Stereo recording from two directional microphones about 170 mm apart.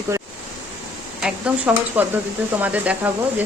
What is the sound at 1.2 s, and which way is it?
Speech, 10° right (ahead or behind).